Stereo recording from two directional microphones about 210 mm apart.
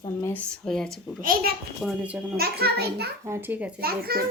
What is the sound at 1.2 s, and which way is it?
Speech, 40° right (ahead or behind).